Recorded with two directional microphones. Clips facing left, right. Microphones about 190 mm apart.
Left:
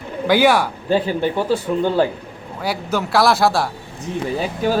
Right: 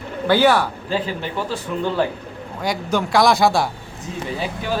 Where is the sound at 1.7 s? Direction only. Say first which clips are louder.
Left 5 dB; 35° left (ahead or behind).